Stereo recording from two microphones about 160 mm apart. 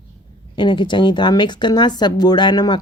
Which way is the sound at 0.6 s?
30° left (ahead or behind).